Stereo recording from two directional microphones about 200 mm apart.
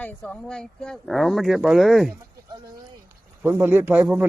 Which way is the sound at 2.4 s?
20° right (ahead or behind).